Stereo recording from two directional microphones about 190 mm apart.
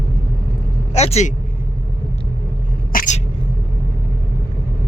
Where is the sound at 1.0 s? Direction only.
35° left (ahead or behind).